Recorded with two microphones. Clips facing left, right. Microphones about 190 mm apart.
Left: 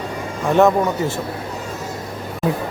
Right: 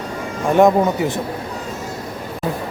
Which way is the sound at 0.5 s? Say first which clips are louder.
Right 2 dB; 15° right (ahead or behind).